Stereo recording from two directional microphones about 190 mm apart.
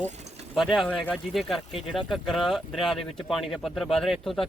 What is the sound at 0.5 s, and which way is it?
Speech, centre (ahead or behind).